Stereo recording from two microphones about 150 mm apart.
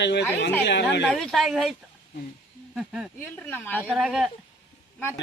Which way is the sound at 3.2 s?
15° left (ahead or behind).